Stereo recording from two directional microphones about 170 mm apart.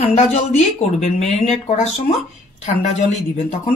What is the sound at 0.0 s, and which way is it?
Speech, 40° left (ahead or behind).